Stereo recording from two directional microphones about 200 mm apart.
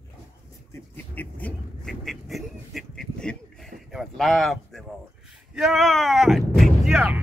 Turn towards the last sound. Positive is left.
turn(degrees=-5)  # may be behind; listen again after turning